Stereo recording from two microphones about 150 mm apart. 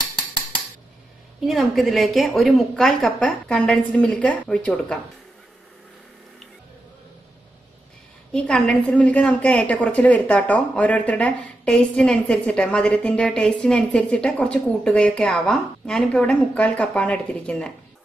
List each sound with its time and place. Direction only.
1.4 s a woman's voice: centre (ahead or behind)
8.3 s a woman's voice: 5° left (ahead or behind)